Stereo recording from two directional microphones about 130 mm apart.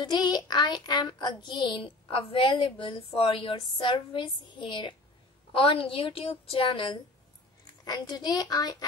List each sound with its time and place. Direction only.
0.0 s a child's voice: 35° left (ahead or behind)